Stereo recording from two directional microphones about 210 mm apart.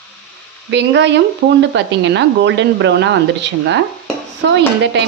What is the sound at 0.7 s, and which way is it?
Speech, 55° right (ahead or behind).